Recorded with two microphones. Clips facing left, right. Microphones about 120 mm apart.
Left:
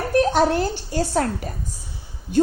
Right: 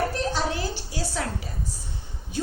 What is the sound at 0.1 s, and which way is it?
A woman's voice, 55° left (ahead or behind).